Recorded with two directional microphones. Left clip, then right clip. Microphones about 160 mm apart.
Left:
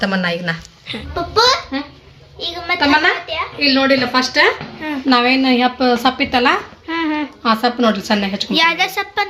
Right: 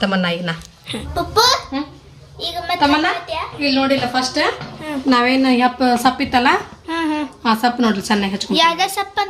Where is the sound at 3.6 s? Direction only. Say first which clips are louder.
Left 3 dB; 55° left (ahead or behind).